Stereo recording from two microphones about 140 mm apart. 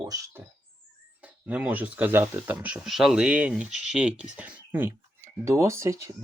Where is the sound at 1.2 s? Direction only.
10° right (ahead or behind).